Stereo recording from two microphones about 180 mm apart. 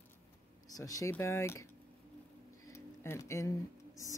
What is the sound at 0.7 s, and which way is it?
Speech, 20° left (ahead or behind).